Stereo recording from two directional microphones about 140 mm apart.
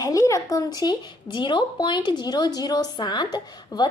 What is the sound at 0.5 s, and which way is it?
A woman's voice, 30° left (ahead or behind).